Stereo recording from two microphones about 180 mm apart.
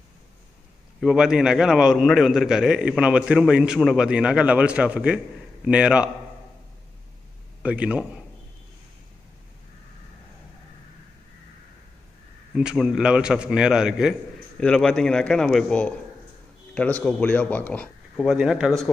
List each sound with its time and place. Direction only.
1.0 s a man's voice: 5° right (ahead or behind)
7.6 s a man's voice: 5° right (ahead or behind)
12.5 s a man's voice: 5° right (ahead or behind)